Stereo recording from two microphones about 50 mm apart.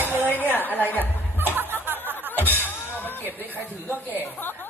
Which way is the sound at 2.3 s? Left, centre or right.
Left.